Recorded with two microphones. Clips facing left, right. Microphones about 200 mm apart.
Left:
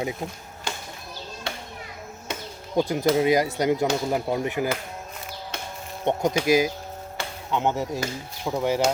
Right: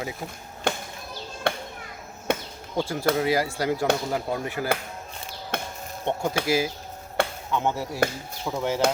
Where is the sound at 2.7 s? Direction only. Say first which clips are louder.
Left 3 dB; 20° left (ahead or behind).